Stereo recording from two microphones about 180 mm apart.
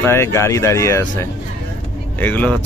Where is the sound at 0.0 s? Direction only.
15° left (ahead or behind).